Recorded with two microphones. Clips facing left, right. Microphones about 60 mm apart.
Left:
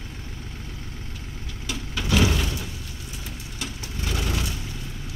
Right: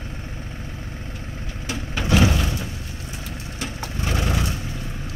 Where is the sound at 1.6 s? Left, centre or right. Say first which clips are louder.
Right 3 dB; right.